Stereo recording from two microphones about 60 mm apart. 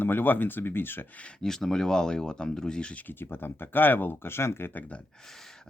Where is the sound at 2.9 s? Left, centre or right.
Left.